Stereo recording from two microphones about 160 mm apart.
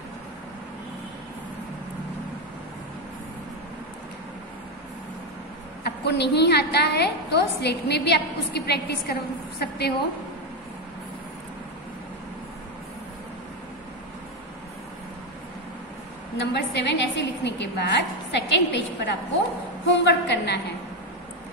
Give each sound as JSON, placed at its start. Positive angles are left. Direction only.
{"t": 5.9, "sound": "a woman's voice", "side_deg": 90}
{"t": 16.3, "sound": "a woman's voice", "side_deg": 90}